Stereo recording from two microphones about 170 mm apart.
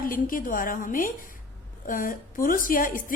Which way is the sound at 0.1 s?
55° left (ahead or behind).